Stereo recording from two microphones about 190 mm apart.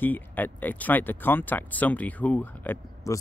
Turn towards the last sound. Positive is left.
turn(degrees=15)  # may be behind; listen again after turning